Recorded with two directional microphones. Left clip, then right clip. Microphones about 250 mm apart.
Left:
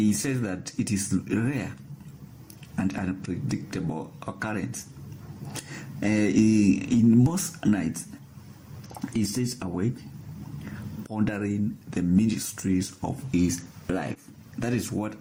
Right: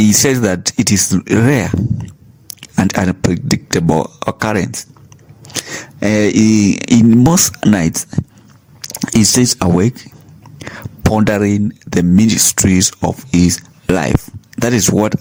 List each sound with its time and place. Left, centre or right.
0.0 s speech: right